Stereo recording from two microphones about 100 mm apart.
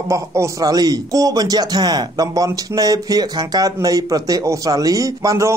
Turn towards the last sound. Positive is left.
turn(degrees=-35)  # may be behind; listen again after turning